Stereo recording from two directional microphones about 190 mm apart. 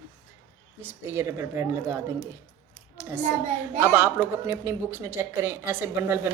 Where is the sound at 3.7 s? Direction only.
10° right (ahead or behind).